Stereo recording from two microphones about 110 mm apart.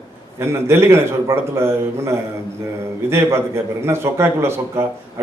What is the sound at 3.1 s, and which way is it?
A man's voice, 25° right (ahead or behind).